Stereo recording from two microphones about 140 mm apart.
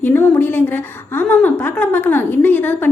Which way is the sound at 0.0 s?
15° left (ahead or behind).